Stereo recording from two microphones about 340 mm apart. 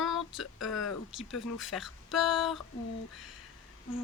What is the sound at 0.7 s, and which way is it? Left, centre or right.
Speech, left.